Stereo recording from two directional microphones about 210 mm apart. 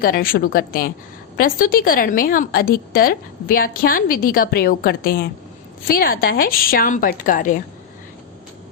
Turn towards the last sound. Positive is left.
turn(degrees=40)  # may be behind; listen again after turning